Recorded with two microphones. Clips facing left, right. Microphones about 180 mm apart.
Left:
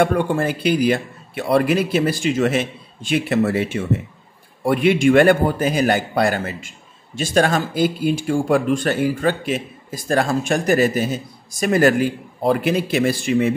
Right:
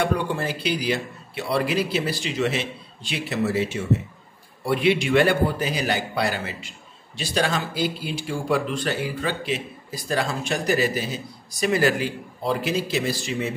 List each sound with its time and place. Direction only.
0.0 s speech: 50° left (ahead or behind)